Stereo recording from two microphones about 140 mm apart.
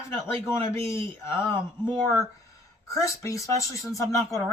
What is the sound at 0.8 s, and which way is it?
Speech, 20° left (ahead or behind).